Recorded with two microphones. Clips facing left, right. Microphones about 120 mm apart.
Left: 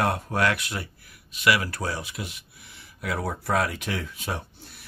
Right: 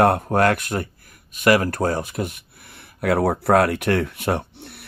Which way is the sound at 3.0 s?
60° right (ahead or behind).